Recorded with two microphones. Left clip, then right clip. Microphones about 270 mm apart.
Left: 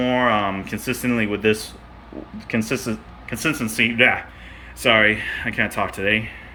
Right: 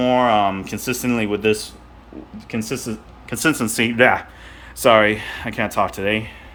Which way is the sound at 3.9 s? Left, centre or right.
Right.